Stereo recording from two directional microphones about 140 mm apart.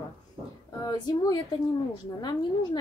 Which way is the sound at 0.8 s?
30° left (ahead or behind).